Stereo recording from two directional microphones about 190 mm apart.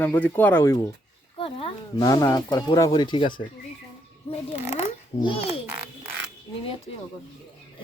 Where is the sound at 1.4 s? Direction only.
30° left (ahead or behind).